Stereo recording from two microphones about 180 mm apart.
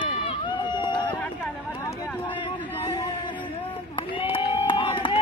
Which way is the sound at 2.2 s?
30° left (ahead or behind).